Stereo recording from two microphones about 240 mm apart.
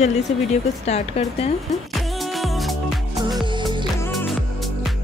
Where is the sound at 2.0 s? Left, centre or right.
Centre.